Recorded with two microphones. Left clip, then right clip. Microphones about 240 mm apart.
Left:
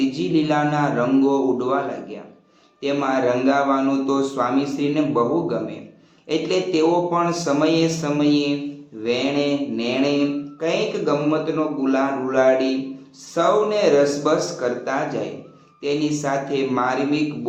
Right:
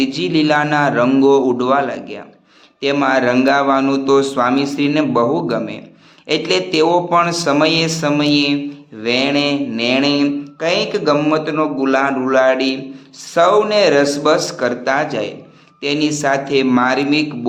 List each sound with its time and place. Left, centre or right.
0.1 s a man's voice: right